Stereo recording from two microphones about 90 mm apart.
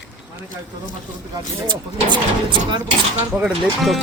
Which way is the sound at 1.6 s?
60° right (ahead or behind).